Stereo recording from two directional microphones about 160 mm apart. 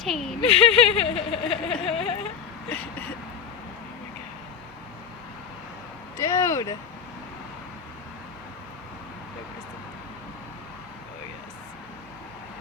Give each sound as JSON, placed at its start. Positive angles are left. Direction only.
{"t": 0.0, "sound": "speech", "side_deg": 0}
{"t": 0.5, "sound": "speech", "side_deg": 40}
{"t": 6.1, "sound": "vehicle", "side_deg": 20}